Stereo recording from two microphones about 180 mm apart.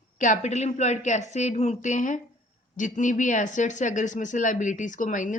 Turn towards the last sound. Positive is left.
turn(degrees=45)  # may be behind; listen again after turning